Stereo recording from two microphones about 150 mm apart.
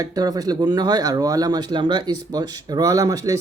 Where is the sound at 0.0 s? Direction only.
25° right (ahead or behind).